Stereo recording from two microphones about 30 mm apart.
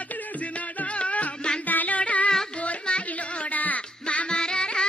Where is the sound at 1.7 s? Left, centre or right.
Left.